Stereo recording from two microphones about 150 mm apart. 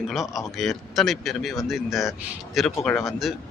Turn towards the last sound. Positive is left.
turn(degrees=0)  # may be behind; listen again after turning